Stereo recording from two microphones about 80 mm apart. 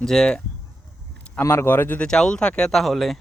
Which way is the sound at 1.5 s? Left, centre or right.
Left.